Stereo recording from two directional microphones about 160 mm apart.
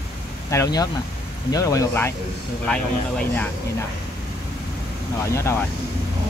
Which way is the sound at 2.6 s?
5° left (ahead or behind).